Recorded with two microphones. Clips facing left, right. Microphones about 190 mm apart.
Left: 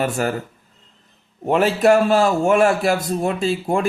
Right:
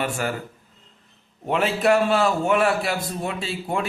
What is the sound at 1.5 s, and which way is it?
A man's voice, 45° left (ahead or behind).